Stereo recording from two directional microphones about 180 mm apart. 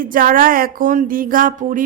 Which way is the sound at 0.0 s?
50° right (ahead or behind).